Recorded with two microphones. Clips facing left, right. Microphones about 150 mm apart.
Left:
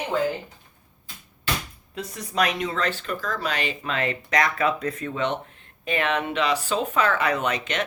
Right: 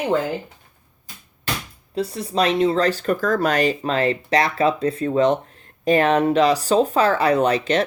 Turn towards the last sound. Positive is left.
turn(degrees=-35)  # may be behind; listen again after turning